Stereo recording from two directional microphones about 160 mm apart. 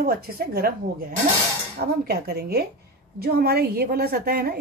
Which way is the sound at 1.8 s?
80° right.